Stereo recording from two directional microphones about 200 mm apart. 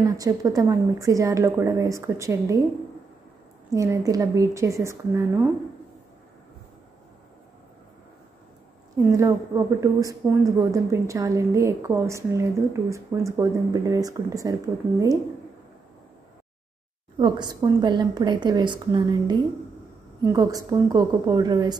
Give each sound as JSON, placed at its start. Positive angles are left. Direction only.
{"t": 0.0, "sound": "a woman's voice", "side_deg": -20}
{"t": 3.7, "sound": "a woman's voice", "side_deg": -15}
{"t": 8.9, "sound": "a woman's voice", "side_deg": -15}
{"t": 17.2, "sound": "a woman's voice", "side_deg": -20}